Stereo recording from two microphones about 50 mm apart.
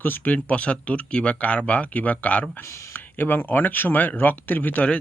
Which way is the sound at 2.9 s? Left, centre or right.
Left.